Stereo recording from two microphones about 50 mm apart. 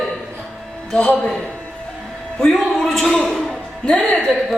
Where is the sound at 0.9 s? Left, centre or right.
Centre.